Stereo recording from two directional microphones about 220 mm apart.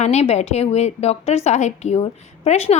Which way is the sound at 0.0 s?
30° left (ahead or behind).